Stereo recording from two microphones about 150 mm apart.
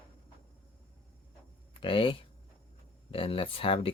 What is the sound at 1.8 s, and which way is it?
Speech, 35° left (ahead or behind).